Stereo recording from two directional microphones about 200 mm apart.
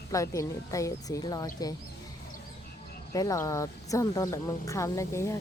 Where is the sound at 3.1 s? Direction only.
15° left (ahead or behind).